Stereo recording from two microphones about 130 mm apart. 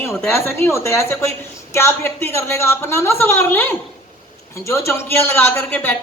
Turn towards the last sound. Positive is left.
turn(degrees=15)  # may be behind; listen again after turning